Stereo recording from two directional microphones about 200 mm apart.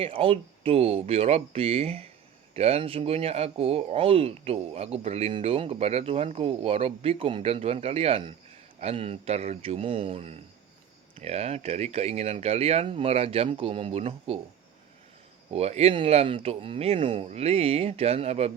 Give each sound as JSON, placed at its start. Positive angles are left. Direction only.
{"t": 0.0, "sound": "speech", "side_deg": -25}
{"t": 15.4, "sound": "speech", "side_deg": -30}